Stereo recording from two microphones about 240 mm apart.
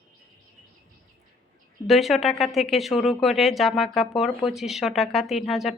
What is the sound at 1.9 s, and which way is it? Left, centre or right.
Speech, centre.